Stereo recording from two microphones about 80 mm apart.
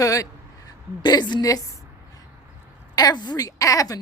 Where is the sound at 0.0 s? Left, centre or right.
Left.